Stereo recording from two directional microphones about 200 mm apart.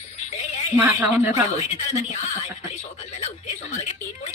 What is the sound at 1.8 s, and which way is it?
Speech, 35° left (ahead or behind).